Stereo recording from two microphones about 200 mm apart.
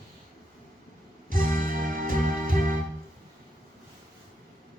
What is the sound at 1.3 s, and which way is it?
Music, 45° right (ahead or behind).